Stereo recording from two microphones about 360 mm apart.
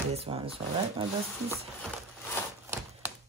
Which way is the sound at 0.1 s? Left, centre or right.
Centre.